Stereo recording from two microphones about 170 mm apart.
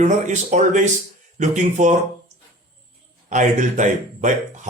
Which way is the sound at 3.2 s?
45° right (ahead or behind).